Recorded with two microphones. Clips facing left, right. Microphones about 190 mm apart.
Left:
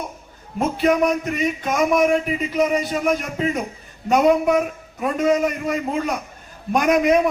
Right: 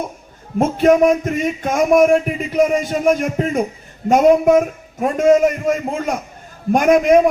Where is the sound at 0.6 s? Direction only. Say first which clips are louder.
Right 6 dB; 45° right (ahead or behind).